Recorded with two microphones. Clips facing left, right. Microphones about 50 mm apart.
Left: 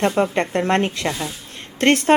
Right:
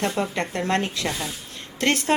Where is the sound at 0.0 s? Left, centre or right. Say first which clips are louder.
Left 6 dB; left.